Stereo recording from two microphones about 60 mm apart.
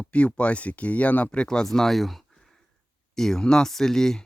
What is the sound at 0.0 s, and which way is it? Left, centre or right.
Speech, left.